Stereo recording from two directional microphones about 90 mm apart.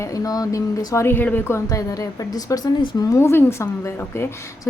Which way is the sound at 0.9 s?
25° left (ahead or behind).